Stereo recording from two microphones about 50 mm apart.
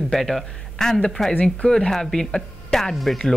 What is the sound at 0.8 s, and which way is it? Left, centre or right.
Speech, centre.